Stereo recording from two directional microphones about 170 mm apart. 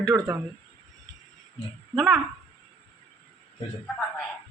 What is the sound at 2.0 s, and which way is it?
Speech, centre (ahead or behind).